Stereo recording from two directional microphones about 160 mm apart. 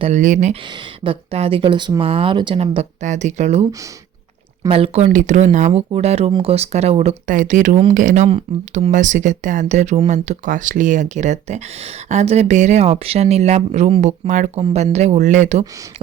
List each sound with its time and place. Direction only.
0.0 s speech: 50° right (ahead or behind)
1.0 s speech: 40° right (ahead or behind)
4.7 s speech: 35° right (ahead or behind)
14.6 s speech: 35° right (ahead or behind)